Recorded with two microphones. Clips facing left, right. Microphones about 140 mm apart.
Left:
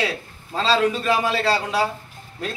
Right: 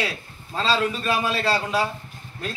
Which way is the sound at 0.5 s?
20° left (ahead or behind).